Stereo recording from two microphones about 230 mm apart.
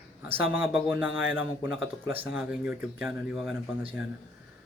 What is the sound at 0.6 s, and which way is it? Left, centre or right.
Speech, centre.